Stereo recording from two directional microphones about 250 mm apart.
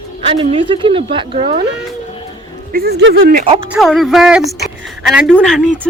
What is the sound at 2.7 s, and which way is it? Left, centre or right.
Speech, right.